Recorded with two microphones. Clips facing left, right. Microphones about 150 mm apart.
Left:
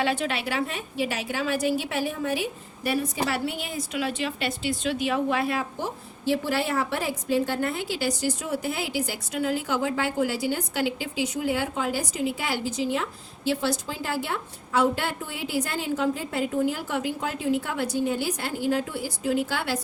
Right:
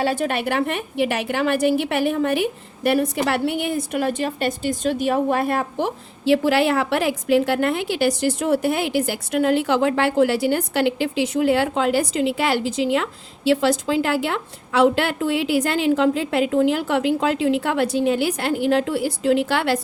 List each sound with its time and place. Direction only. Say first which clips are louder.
0.0 s a woman's voice: right 5 dB; 45° right (ahead or behind)
5.7 s a woman's voice: right 8 dB; 90° right; by 19.8 s 75° right (ahead or behind)